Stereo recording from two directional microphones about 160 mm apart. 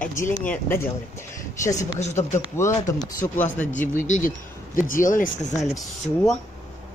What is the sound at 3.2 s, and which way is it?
Speech, 55° left (ahead or behind).